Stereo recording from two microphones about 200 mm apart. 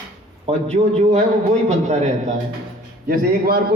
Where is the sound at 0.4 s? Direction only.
35° right (ahead or behind).